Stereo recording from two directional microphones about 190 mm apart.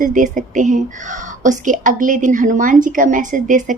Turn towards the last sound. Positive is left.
turn(degrees=-40)  # may be behind; listen again after turning